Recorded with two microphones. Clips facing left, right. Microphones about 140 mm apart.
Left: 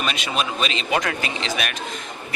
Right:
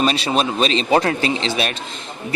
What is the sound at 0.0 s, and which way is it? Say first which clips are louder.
A man's voice: right 7 dB; 35° right (ahead or behind).